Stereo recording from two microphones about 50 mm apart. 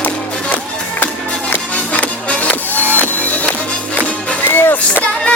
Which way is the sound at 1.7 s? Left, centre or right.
Left.